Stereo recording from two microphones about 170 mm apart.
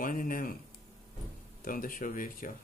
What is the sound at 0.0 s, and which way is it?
Speech, 55° left (ahead or behind).